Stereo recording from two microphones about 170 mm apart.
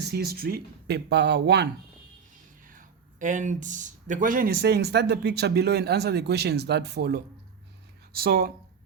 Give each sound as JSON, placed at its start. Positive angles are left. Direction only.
{"t": 0.0, "sound": "speech", "side_deg": -70}
{"t": 2.6, "sound": "speech", "side_deg": -50}
{"t": 8.1, "sound": "speech", "side_deg": -65}